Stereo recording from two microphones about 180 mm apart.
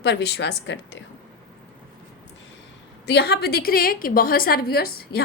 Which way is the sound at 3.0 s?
65° left (ahead or behind).